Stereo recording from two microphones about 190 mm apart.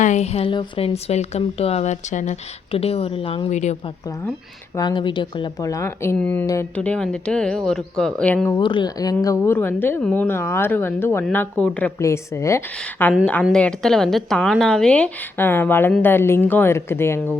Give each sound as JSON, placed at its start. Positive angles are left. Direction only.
{"t": 0.0, "sound": "speech", "side_deg": 35}
{"t": 4.7, "sound": "speech", "side_deg": 20}
{"t": 8.5, "sound": "speech", "side_deg": 25}